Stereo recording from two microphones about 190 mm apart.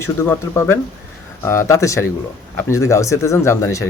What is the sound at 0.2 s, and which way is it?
Speech, 15° left (ahead or behind).